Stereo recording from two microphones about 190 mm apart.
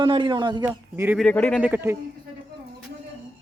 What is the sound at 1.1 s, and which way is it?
Speech, 5° left (ahead or behind).